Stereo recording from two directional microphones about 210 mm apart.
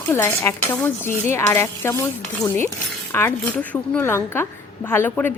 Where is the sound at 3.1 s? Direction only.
10° left (ahead or behind).